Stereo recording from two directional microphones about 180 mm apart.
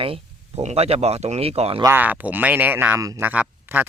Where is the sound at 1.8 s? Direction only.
10° right (ahead or behind).